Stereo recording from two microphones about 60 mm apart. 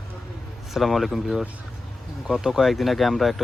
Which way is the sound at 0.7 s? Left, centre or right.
Centre.